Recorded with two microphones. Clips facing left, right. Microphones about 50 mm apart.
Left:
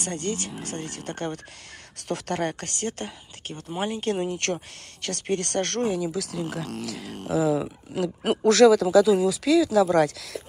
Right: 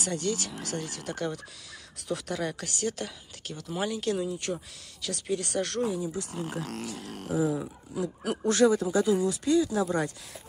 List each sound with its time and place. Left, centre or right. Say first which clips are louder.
0.0 s speech: left 1 dB; left
2.0 s speech: left 4 dB; left
4.2 s speech: left 4 dB; left
5.0 s speech: left 4 dB; left
8.5 s speech: left 7 dB; left